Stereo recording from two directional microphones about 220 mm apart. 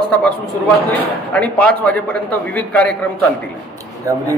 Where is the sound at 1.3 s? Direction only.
5° left (ahead or behind).